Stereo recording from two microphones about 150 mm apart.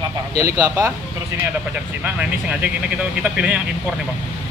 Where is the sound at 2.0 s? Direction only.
10° right (ahead or behind).